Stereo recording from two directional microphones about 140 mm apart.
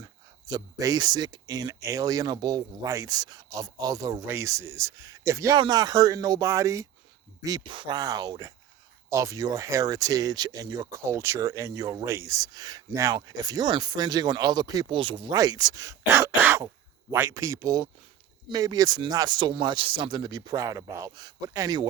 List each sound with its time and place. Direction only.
0.0 s speech: 25° right (ahead or behind)